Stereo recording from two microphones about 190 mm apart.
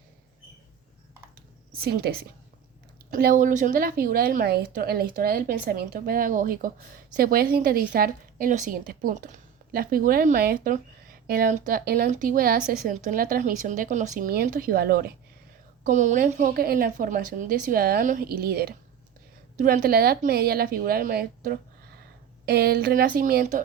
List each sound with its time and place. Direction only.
1.7 s a woman's voice: 55° right (ahead or behind)
15.8 s a woman's voice: 40° right (ahead or behind)